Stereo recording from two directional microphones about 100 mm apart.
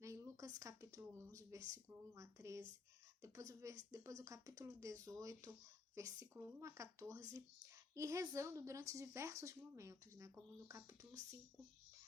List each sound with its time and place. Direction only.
0.0 s speech: 30° right (ahead or behind)